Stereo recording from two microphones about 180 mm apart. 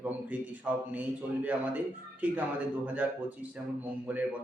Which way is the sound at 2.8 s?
10° right (ahead or behind).